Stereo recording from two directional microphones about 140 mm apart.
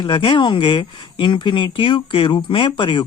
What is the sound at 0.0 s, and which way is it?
Speech, 35° left (ahead or behind).